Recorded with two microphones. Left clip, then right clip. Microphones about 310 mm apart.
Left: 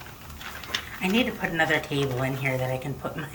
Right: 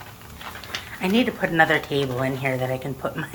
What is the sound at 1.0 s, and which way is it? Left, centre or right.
Speech, centre.